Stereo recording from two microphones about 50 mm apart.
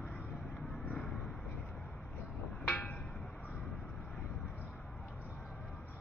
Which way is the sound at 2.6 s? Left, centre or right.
Left.